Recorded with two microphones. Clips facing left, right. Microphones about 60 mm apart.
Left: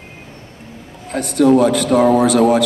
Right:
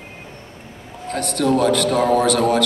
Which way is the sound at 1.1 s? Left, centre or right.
Centre.